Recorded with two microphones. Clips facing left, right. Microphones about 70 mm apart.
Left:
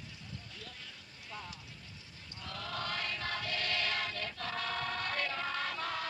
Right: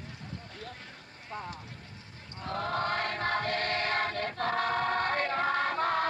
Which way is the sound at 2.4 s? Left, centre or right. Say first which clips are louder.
Right 9 dB; right.